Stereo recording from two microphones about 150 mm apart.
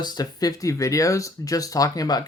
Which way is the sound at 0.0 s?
25° left (ahead or behind).